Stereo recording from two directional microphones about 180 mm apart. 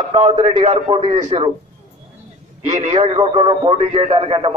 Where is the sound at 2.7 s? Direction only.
40° right (ahead or behind).